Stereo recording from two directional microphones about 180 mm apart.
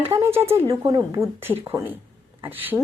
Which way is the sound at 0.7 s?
20° right (ahead or behind).